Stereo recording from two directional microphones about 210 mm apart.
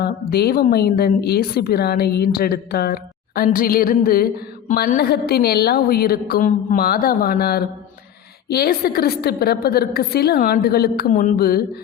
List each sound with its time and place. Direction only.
0.0 s a woman's voice: 50° left (ahead or behind)